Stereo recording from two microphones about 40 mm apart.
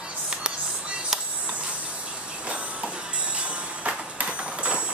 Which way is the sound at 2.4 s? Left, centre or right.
Right.